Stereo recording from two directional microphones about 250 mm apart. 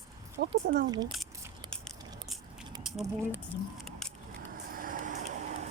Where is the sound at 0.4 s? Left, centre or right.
Right.